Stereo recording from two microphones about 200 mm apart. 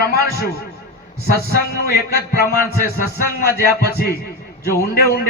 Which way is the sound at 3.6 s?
50° left (ahead or behind).